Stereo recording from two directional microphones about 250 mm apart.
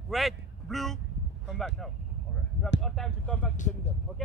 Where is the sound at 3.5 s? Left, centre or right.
Left.